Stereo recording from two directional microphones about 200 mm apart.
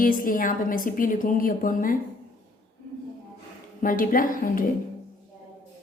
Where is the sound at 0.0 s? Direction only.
45° left (ahead or behind).